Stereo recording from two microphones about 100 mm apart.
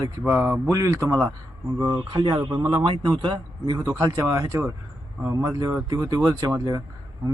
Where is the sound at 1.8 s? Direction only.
45° right (ahead or behind).